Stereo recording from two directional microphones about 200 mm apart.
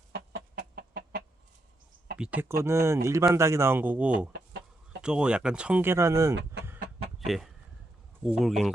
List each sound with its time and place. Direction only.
0.1 s chicken: 55° right (ahead or behind)
2.1 s speech: 5° right (ahead or behind)
4.3 s chicken: 60° right (ahead or behind)
5.0 s speech: 5° right (ahead or behind)
7.3 s speech: centre (ahead or behind)